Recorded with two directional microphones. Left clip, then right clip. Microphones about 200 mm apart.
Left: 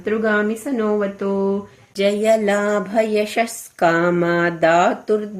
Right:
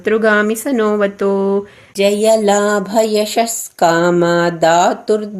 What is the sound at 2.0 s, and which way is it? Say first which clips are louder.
A woman's voice: right 4 dB; 20° right (ahead or behind).